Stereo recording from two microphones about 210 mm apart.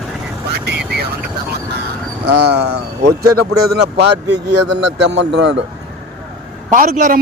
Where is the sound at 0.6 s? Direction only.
50° right (ahead or behind).